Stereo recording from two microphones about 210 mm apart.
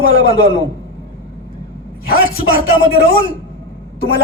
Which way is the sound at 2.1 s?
50° left (ahead or behind).